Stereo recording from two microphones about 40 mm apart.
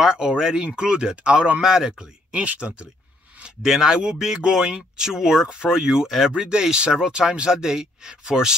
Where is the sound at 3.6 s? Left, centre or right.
Centre.